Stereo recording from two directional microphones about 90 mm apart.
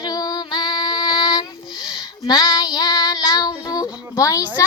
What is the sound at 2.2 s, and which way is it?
Child singing, 45° left (ahead or behind).